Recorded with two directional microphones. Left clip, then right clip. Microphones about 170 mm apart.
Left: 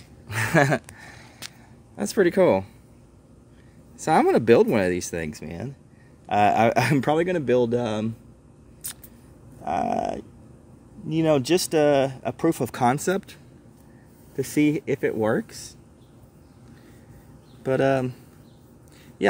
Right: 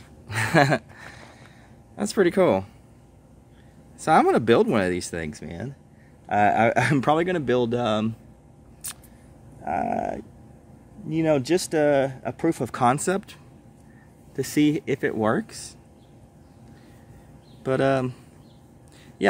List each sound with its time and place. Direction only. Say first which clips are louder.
0.3 s a sound: right 1 dB; centre (ahead or behind)
2.0 s speech: left 1 dB; 5° right (ahead or behind)
4.0 s speech: right 1 dB; 5° right (ahead or behind)
7.1 s speech: even; 15° right (ahead or behind)
8.8 s a sound: right 1 dB; 15° right (ahead or behind)
9.7 s speech: left 1 dB; 5° left (ahead or behind)
14.3 s speech: even; 15° right (ahead or behind)
17.6 s speech: left 1 dB; 5° right (ahead or behind)